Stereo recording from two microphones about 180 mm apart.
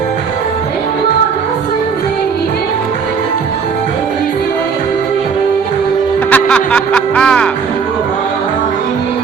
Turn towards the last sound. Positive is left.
turn(degrees=5)  # may be behind; listen again after turning